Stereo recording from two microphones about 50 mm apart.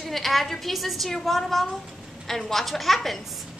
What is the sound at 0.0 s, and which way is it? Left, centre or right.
A woman's voice, centre.